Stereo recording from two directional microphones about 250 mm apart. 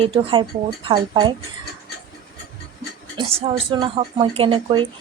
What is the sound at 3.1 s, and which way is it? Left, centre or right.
Speech, right.